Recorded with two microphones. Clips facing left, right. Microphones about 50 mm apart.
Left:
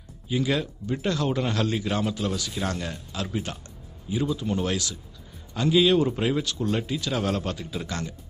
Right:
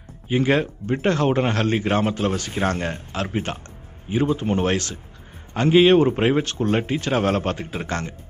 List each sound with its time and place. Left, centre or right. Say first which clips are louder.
0.3 s a man's voice: right 6 dB; right